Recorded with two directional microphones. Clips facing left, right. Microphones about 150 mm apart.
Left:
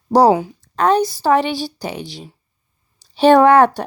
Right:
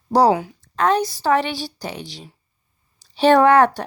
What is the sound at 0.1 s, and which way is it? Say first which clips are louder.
A woman's voice: left 3 dB; 30° left (ahead or behind).